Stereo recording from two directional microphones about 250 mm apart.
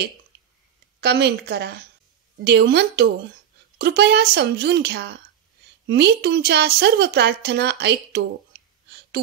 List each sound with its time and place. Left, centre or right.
1.0 s a woman's voice: right